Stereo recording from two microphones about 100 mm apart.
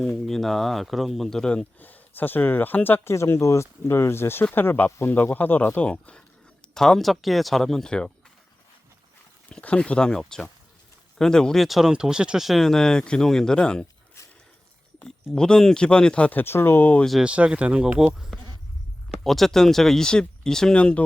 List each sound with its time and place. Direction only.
0.3 s speech: 5° left (ahead or behind)
9.5 s speech: 10° left (ahead or behind)
14.2 s a sound: 30° left (ahead or behind)
14.9 s speech: 5° left (ahead or behind)
17.1 s speech: 10° right (ahead or behind); by 21.0 s 10° left (ahead or behind)